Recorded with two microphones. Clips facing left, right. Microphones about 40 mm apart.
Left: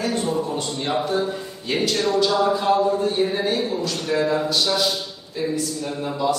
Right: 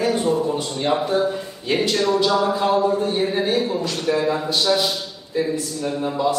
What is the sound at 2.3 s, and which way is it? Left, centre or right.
Speech, right.